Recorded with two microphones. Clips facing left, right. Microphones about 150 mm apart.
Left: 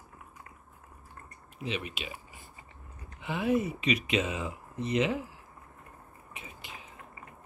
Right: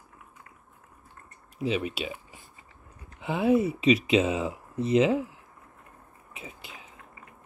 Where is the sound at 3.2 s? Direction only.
30° right (ahead or behind).